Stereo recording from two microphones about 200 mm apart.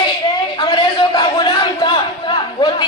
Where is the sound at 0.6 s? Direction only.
20° left (ahead or behind).